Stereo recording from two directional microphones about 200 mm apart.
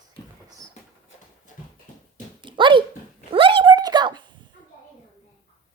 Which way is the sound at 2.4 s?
25° right (ahead or behind).